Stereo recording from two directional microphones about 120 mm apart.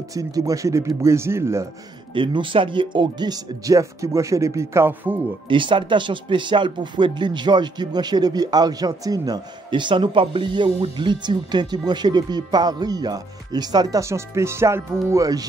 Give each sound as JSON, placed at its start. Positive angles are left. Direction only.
{"t": 0.1, "sound": "speech", "side_deg": -30}
{"t": 2.1, "sound": "speech", "side_deg": -45}
{"t": 5.5, "sound": "speech", "side_deg": -45}